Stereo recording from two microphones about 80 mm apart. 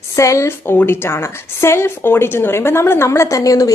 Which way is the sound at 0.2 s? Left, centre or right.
Left.